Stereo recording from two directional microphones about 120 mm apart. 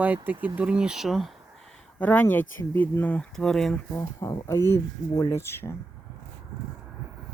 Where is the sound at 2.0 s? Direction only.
15° left (ahead or behind).